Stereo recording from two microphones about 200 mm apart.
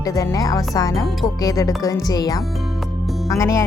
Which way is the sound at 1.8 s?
15° left (ahead or behind).